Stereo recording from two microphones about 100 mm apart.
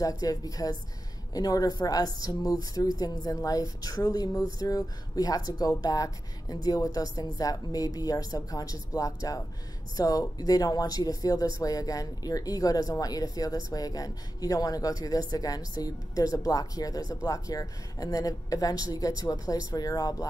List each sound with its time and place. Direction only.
0.2 s speech: 40° left (ahead or behind)